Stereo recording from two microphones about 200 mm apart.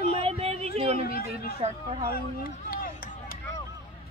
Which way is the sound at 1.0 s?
50° left (ahead or behind).